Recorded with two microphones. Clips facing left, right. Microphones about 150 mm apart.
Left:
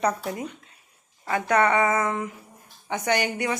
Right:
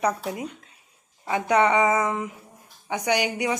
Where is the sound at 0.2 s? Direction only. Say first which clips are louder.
Even; 5° right (ahead or behind).